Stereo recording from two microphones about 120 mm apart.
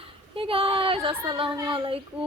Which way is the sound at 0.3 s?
50° right (ahead or behind).